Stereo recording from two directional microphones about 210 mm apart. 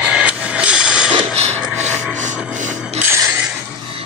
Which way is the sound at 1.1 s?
30° right (ahead or behind).